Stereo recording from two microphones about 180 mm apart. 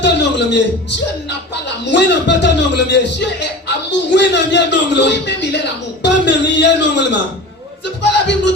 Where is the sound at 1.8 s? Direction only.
75° left (ahead or behind).